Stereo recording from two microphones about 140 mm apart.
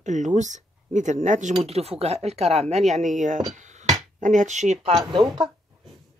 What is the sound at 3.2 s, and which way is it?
Speech, 65° right (ahead or behind).